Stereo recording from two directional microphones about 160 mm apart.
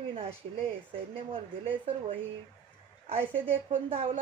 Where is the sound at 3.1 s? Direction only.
40° right (ahead or behind).